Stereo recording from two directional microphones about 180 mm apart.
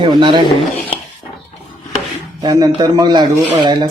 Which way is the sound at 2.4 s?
20° right (ahead or behind).